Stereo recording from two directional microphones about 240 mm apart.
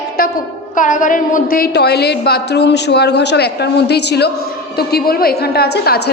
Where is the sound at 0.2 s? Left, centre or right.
Left.